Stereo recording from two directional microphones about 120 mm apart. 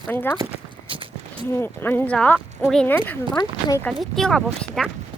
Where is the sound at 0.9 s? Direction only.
45° right (ahead or behind).